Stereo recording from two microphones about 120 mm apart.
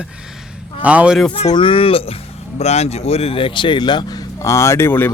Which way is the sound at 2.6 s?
65° left (ahead or behind).